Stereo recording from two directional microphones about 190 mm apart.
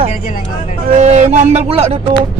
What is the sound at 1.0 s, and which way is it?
Speech, 35° right (ahead or behind).